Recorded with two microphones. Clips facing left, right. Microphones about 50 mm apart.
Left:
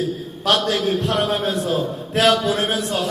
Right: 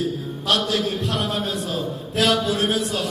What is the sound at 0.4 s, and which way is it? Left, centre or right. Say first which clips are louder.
Speech: left 3 dB; left.